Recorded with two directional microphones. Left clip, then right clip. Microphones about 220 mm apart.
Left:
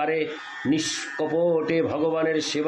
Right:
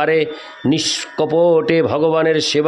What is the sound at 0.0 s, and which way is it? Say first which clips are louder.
Speech: right 9 dB; 50° right (ahead or behind).